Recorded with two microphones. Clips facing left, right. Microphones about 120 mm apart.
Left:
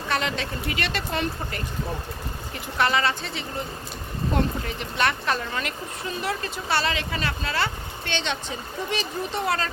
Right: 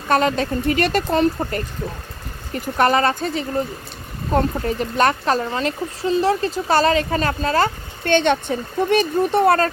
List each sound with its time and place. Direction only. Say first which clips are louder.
0.1 s speech: right 10 dB; 45° right (ahead or behind)